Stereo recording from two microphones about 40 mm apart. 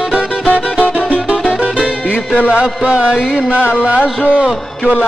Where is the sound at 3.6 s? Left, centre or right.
Left.